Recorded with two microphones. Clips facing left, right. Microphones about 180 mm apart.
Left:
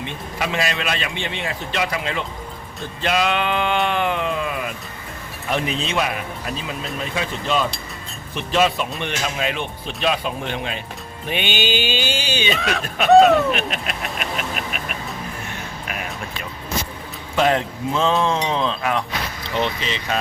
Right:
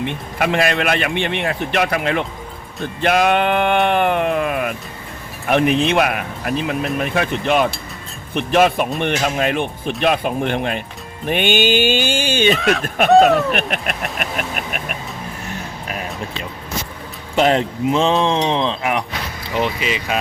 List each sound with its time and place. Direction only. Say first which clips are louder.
0.0 s a man's voice: right 6 dB; 55° right (ahead or behind)
11.3 s music: right 6 dB; 50° right (ahead or behind)
12.5 s speech: right 6 dB; centre (ahead or behind)
13.5 s a man's voice: right 2 dB; 55° right (ahead or behind)
14.2 s music: right 2 dB; 50° right (ahead or behind)
15.9 s music: right 4 dB; 30° right (ahead or behind)
17.3 s speech: right 3 dB; 25° right (ahead or behind)
19.5 s speech: right 3 dB; 5° right (ahead or behind)